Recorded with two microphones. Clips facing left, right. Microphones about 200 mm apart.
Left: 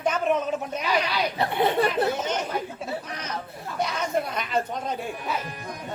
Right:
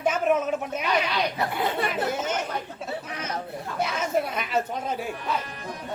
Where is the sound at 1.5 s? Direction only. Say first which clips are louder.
Left 4 dB; 25° left (ahead or behind).